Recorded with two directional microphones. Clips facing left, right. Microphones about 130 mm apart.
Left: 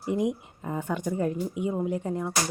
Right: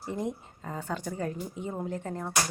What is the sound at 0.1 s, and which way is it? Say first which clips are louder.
A woman's voice: left 7 dB; 15° left (ahead or behind).